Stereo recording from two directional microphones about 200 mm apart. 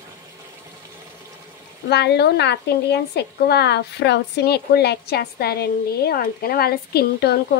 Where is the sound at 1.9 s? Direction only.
55° left (ahead or behind).